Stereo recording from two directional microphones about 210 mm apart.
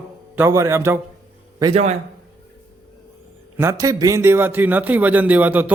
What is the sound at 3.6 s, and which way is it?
A man's voice, 15° right (ahead or behind).